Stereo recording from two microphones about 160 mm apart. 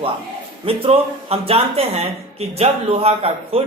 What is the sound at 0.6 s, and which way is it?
A man's voice, 35° right (ahead or behind).